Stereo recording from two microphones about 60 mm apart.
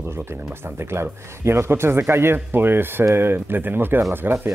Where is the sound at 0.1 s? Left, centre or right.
Right.